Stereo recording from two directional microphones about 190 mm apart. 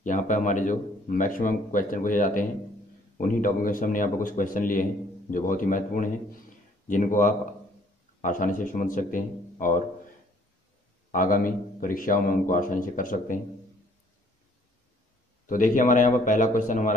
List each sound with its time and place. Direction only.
0.0 s a man's voice: 40° left (ahead or behind)
11.1 s a man's voice: 45° left (ahead or behind)
15.4 s a man's voice: 45° left (ahead or behind)